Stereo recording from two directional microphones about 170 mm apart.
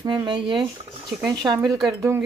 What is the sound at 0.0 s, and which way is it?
Speech, 25° right (ahead or behind).